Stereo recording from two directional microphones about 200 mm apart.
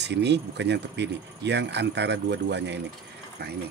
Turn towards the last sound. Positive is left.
turn(degrees=-55)  # may be behind; listen again after turning